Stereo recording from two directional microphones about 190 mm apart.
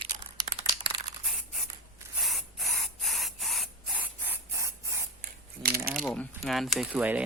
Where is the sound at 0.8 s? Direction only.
25° right (ahead or behind).